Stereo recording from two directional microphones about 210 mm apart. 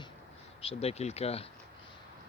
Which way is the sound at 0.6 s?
30° left (ahead or behind).